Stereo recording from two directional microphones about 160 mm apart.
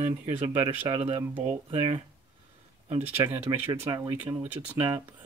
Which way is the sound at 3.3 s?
15° right (ahead or behind).